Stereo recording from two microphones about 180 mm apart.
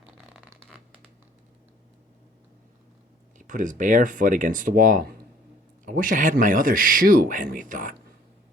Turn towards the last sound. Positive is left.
turn(degrees=-45)  # may be behind; listen again after turning